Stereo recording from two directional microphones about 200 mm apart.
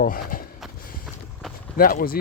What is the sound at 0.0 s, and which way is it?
Speech, 45° left (ahead or behind).